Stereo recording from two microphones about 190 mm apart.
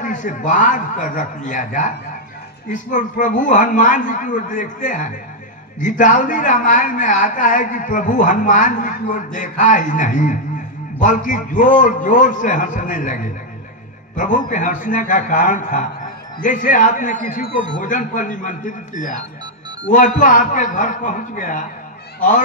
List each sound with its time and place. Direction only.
0.0 s a woman's voice: 40° left (ahead or behind)